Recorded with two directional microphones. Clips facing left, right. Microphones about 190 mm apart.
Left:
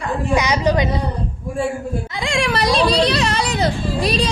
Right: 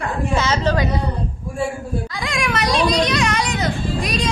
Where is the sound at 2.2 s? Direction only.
30° left (ahead or behind).